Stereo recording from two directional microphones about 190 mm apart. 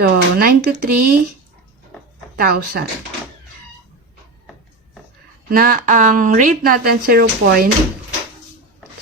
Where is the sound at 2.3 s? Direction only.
55° right (ahead or behind).